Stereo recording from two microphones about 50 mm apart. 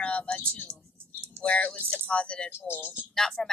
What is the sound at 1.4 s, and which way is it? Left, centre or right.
Speech, left.